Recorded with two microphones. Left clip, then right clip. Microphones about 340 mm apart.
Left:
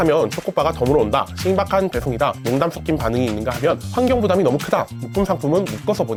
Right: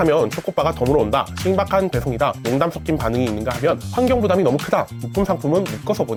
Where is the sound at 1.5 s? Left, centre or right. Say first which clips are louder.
Even; left.